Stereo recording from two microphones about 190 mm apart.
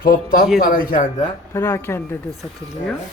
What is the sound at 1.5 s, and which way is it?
Speech, 10° left (ahead or behind).